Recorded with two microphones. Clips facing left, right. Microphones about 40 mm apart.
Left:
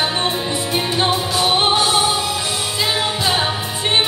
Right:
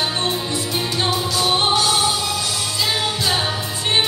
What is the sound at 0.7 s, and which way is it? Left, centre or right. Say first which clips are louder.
Music: left 4 dB; left.